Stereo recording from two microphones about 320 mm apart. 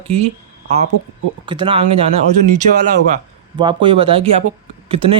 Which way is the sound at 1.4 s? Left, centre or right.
Centre.